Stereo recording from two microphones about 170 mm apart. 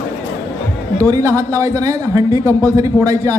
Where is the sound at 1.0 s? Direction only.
20° right (ahead or behind).